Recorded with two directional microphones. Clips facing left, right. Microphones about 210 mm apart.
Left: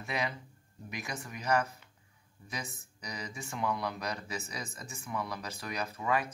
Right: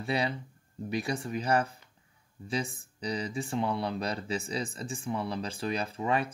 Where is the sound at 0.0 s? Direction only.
30° right (ahead or behind).